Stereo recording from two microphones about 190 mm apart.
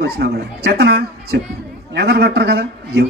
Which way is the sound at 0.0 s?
55° right (ahead or behind).